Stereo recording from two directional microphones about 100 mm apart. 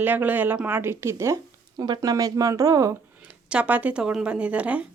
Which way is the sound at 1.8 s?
40° right (ahead or behind).